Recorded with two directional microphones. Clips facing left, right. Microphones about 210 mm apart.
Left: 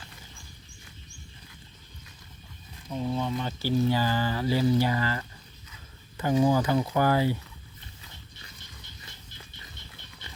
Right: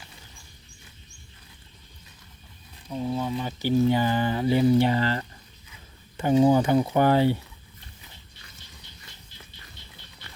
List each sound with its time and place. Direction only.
2.9 s speech: 5° right (ahead or behind); by 7.3 s 25° right (ahead or behind)